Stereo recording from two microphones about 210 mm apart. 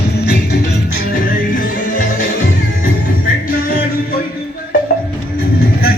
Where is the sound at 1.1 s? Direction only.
40° left (ahead or behind).